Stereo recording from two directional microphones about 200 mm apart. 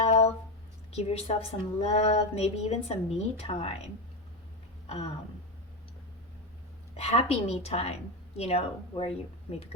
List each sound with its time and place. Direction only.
0.0 s a sound: 30° left (ahead or behind)
0.9 s a woman's voice: 30° left (ahead or behind)
6.9 s a woman's voice: 30° left (ahead or behind)